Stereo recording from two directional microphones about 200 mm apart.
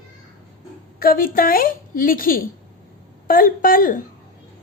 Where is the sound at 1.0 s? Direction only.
45° left (ahead or behind).